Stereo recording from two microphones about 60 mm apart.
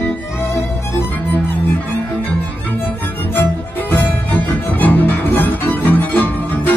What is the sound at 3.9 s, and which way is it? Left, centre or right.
Music, left.